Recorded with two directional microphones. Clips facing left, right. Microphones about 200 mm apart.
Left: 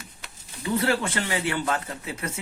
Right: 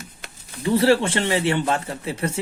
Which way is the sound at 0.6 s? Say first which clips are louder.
Right 7 dB; 30° right (ahead or behind).